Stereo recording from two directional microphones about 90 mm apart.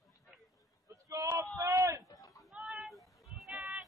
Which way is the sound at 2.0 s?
35° left (ahead or behind).